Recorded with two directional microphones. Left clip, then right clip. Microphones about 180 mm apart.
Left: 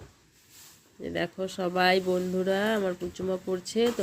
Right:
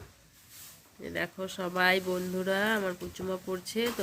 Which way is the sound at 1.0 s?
25° left (ahead or behind).